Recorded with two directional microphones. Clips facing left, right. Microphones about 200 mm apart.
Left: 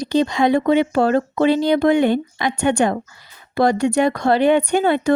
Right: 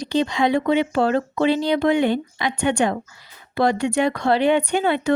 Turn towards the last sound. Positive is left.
turn(degrees=45)  # may be behind; listen again after turning